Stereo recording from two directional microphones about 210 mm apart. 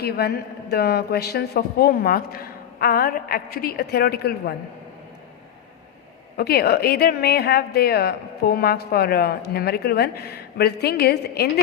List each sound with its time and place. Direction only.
0.0 s a woman's voice: 50° left (ahead or behind)
6.3 s a woman's voice: 50° left (ahead or behind)